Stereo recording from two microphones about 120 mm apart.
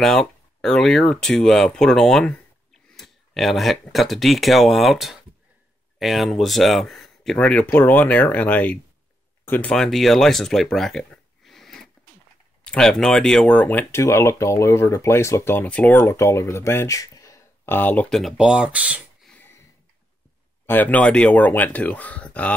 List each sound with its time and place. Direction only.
0.0 s speech: 5° left (ahead or behind)
7.3 s speech: 10° left (ahead or behind)
18.1 s speech: 5° right (ahead or behind)
19.3 s a sound: 20° left (ahead or behind)
20.6 s speech: 15° left (ahead or behind)